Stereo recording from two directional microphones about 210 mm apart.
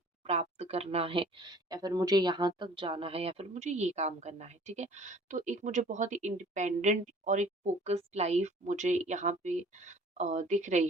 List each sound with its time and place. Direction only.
0.3 s a woman's voice: 30° right (ahead or behind)